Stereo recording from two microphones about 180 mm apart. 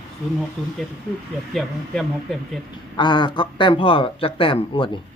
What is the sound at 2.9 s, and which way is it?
Speech, 25° left (ahead or behind).